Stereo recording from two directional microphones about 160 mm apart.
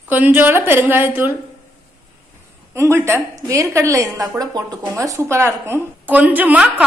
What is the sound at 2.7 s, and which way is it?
A woman's voice, 15° right (ahead or behind).